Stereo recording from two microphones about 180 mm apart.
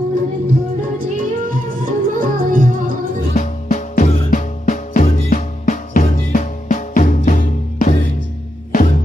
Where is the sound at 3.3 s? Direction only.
40° left (ahead or behind).